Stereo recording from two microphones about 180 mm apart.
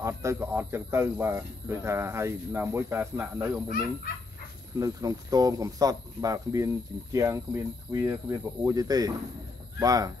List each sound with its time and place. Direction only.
0.0 s speech: 15° right (ahead or behind)
4.7 s speech: 20° right (ahead or behind)